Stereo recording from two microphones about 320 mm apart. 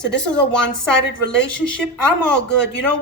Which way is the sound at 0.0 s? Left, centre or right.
Left.